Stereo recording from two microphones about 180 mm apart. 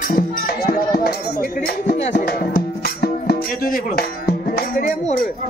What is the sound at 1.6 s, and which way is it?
Music, 65° left (ahead or behind).